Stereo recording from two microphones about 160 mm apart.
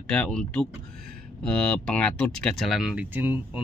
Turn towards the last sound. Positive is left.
turn(degrees=-10)  # may be behind; listen again after turning